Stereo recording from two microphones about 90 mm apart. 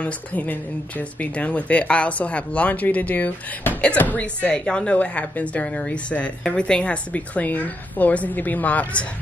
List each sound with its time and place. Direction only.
0.0 s a woman's voice: 15° left (ahead or behind)